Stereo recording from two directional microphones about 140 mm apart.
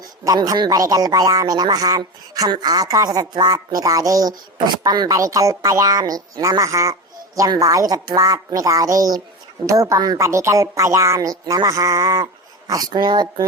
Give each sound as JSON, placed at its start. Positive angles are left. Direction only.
{"t": 0.3, "sound": "speech", "side_deg": -25}